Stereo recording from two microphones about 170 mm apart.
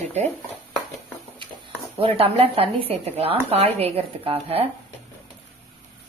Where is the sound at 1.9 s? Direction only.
35° right (ahead or behind).